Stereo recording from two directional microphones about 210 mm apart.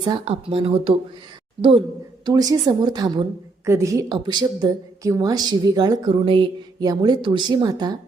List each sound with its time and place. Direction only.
0.0 s a woman's voice: 25° right (ahead or behind)
2.2 s a woman's voice: 15° right (ahead or behind)